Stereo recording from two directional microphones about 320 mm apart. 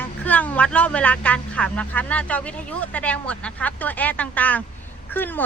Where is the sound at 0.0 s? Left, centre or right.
Centre.